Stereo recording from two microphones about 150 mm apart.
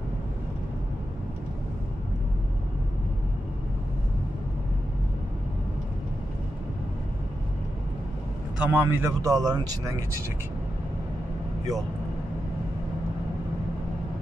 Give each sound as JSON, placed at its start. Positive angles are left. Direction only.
{"t": 8.5, "sound": "a man's voice", "side_deg": -10}
{"t": 9.2, "sound": "speech", "side_deg": -25}